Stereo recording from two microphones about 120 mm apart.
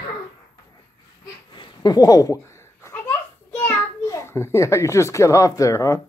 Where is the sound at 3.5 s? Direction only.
20° left (ahead or behind).